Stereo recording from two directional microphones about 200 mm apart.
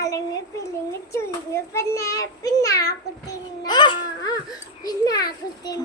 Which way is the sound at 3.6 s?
20° left (ahead or behind).